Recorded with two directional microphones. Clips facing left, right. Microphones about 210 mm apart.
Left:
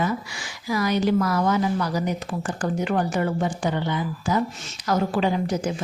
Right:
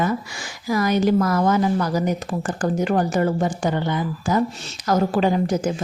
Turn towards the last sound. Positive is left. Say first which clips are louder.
# right 4 dB
turn(degrees=-45)  # may be behind; listen again after turning